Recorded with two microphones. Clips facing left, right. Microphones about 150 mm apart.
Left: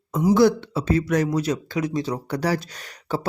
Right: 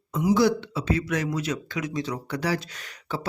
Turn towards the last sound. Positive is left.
turn(degrees=40)  # may be behind; listen again after turning